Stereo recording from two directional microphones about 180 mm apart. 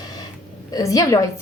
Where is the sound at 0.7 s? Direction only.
20° left (ahead or behind).